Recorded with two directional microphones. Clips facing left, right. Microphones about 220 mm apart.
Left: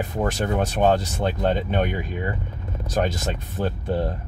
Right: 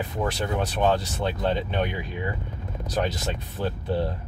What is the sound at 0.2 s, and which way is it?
A man's voice, 45° left (ahead or behind).